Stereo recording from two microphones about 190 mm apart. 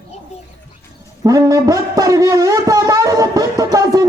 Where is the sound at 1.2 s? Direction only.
20° right (ahead or behind).